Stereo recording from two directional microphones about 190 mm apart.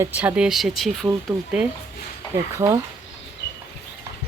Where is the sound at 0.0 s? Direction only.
10° right (ahead or behind).